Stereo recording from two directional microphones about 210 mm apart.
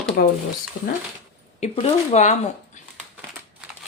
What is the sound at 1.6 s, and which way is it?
Speech, 30° left (ahead or behind).